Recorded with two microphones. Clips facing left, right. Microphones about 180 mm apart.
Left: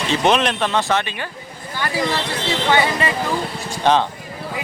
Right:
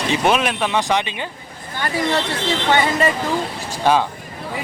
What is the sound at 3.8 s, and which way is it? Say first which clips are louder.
Speech: even; 10° right (ahead or behind).